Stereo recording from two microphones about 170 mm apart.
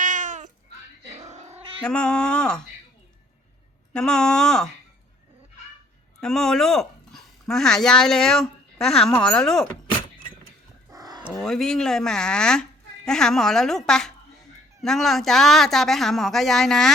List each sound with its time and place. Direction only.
0.0 s a sound: 50° right (ahead or behind)
1.2 s cat: 45° right (ahead or behind)
1.8 s speech: 5° left (ahead or behind)
3.9 s speech: 5° left (ahead or behind)
6.1 s speech: 5° left (ahead or behind)
10.9 s dog: 25° right (ahead or behind)
11.3 s speech: centre (ahead or behind)